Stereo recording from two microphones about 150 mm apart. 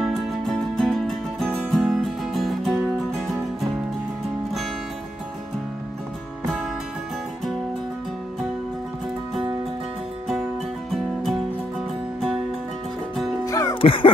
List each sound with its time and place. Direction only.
0.7 s music: 5° left (ahead or behind)
13.5 s music: 20° left (ahead or behind)
13.7 s music: 35° left (ahead or behind)